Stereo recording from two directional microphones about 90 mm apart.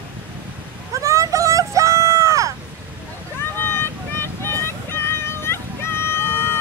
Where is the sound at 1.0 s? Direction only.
35° right (ahead or behind).